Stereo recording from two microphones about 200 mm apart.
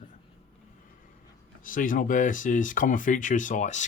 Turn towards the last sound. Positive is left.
turn(degrees=35)  # may be behind; listen again after turning